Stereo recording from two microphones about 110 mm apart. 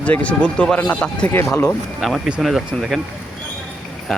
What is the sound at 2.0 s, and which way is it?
Speech, centre (ahead or behind).